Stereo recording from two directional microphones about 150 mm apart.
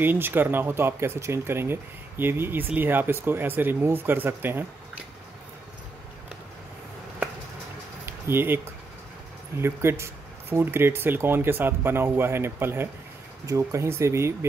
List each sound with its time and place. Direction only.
0.0 s speech: 15° right (ahead or behind)
8.0 s a sound: 15° right (ahead or behind)
9.6 s speech: 15° right (ahead or behind)